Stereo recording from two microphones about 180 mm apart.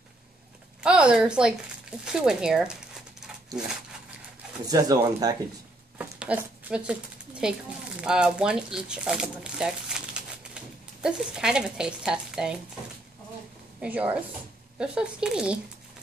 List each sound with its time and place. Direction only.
0.8 s speech: 5° right (ahead or behind)
4.6 s speech: 20° right (ahead or behind)
5.9 s a sound: 5° right (ahead or behind)
8.0 s speech: 5° right (ahead or behind)
13.7 s a woman's voice: 10° right (ahead or behind)